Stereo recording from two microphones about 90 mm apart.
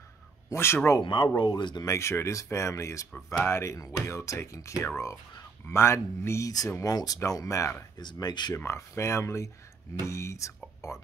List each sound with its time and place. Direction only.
0.5 s speech: 30° left (ahead or behind)
1.0 s speech: 60° left (ahead or behind)
1.9 s speech: 30° left (ahead or behind)
8.0 s speech: 50° left (ahead or behind)
8.5 s speech: 30° left (ahead or behind)